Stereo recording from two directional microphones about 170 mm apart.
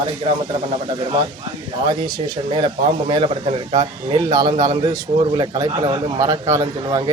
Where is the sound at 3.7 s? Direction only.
35° right (ahead or behind).